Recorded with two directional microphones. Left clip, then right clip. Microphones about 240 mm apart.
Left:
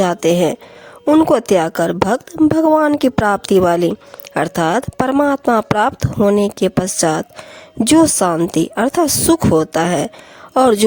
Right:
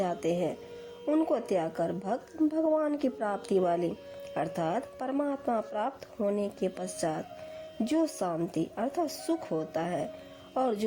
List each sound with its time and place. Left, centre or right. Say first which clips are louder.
0.0 s speech: left 16 dB; left